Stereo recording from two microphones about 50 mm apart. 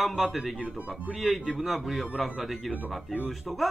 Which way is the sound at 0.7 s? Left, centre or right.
Right.